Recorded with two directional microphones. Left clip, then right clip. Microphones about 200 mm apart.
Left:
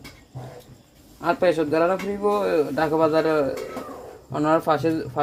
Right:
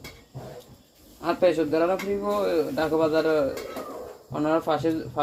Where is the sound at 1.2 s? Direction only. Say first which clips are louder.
Left 2 dB; 40° left (ahead or behind).